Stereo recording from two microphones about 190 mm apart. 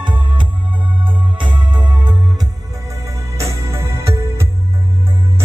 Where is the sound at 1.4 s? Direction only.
25° right (ahead or behind).